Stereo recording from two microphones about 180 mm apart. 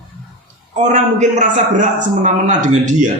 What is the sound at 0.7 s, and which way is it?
A man's voice, 40° right (ahead or behind).